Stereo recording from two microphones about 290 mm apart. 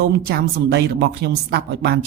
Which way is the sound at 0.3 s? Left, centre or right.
Right.